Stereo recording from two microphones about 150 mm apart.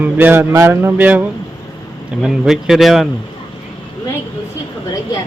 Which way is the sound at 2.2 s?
Centre (ahead or behind).